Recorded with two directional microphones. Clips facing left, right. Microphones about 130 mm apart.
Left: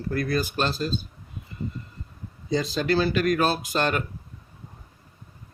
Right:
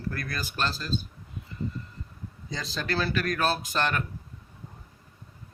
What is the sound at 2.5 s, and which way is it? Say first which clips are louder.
Speech: left 8 dB; 15° left (ahead or behind).